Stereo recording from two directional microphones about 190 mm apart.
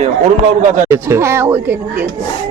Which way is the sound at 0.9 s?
15° right (ahead or behind).